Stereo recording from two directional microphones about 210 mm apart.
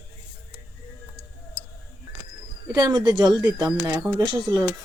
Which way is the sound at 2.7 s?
20° right (ahead or behind).